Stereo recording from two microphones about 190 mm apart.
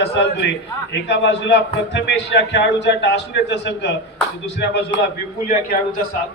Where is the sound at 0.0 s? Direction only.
65° left (ahead or behind).